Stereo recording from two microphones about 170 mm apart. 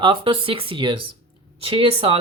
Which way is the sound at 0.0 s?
30° right (ahead or behind).